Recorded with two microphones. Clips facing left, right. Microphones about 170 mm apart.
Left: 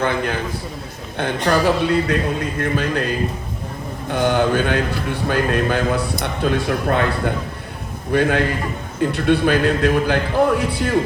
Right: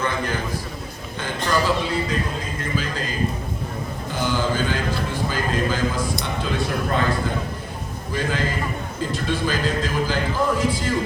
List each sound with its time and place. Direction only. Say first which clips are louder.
1.2 s mantra: left 5 dB; 65° left (ahead or behind)
8.1 s mantra: left 7 dB; 65° left (ahead or behind)